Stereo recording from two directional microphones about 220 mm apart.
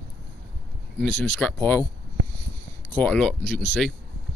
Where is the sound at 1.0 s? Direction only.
5° left (ahead or behind).